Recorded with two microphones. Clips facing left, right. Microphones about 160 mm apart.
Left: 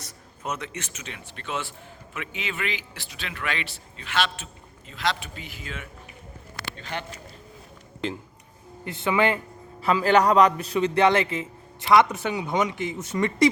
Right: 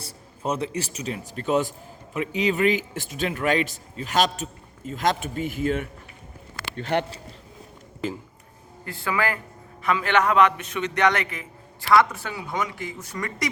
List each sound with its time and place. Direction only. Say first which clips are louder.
0.0 s speech: right 5 dB; 30° right (ahead or behind); by 5.9 s 50° right (ahead or behind)
6.6 s a sound: right 9 dB; 60° right (ahead or behind)
8.0 s speech: right 1 dB; 5° right (ahead or behind)
8.8 s a man's voice: left 3 dB; 20° left (ahead or behind)
9.8 s a man's voice: left 3 dB; 35° left (ahead or behind)